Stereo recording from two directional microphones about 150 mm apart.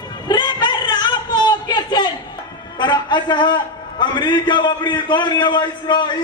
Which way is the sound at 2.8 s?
30° left (ahead or behind).